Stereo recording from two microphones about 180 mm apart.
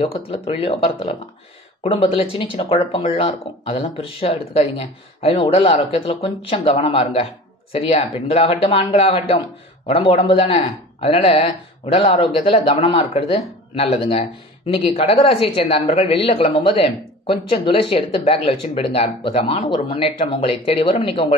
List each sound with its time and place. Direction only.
0.0 s speech: 30° left (ahead or behind)